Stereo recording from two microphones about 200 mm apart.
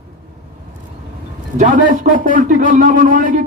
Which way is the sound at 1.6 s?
40° right (ahead or behind).